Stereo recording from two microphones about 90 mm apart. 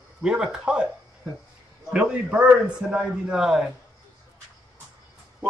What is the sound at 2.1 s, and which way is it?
A man's voice, 10° right (ahead or behind).